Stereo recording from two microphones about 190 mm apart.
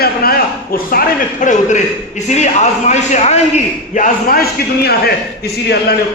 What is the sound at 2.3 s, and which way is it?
A man's voice, 35° left (ahead or behind).